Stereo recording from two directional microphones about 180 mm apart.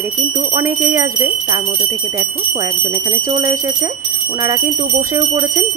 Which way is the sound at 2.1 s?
15° right (ahead or behind).